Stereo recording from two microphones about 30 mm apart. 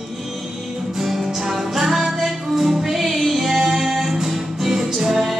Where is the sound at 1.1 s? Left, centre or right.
Centre.